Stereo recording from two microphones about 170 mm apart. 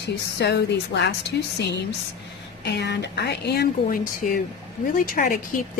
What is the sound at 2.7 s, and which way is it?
Speech, 85° left.